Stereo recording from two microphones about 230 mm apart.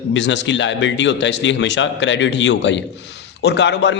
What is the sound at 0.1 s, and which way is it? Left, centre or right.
A man's voice, left.